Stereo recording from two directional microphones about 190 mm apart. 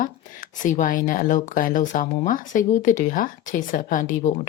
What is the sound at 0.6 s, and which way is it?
Speech, 45° left (ahead or behind).